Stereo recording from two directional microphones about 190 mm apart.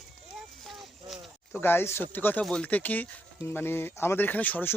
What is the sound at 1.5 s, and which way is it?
Speech, 10° left (ahead or behind).